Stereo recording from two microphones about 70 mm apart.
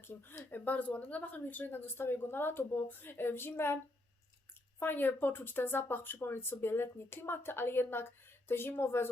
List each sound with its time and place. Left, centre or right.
0.0 s speech: left
4.8 s speech: left